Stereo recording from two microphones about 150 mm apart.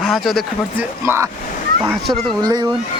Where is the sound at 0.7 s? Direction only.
15° right (ahead or behind).